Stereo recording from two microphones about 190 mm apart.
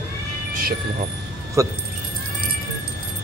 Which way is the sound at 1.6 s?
15° right (ahead or behind).